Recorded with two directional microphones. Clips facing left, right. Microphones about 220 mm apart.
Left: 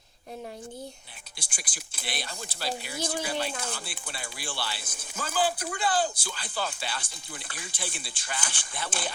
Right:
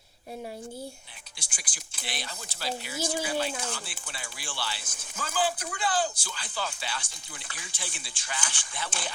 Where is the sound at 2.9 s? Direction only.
5° right (ahead or behind).